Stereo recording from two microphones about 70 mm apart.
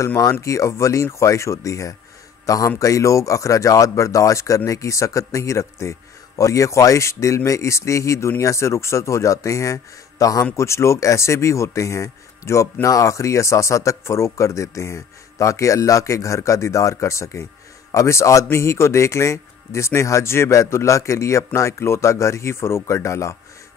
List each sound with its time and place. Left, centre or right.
0.2 s a man's voice: left
10.5 s speech: left